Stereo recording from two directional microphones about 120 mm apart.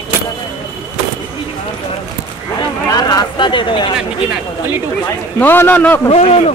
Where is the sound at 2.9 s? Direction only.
35° left (ahead or behind).